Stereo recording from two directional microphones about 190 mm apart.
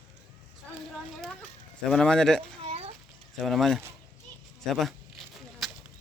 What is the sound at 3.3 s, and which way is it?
Speech, centre (ahead or behind).